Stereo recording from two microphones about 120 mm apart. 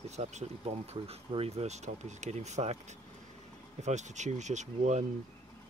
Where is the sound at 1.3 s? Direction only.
60° right (ahead or behind).